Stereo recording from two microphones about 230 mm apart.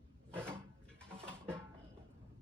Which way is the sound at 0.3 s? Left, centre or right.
Centre.